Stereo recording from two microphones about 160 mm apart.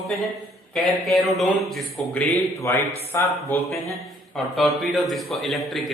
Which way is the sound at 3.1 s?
15° left (ahead or behind).